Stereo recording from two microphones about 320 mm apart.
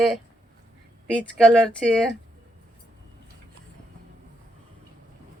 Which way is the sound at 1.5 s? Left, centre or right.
Centre.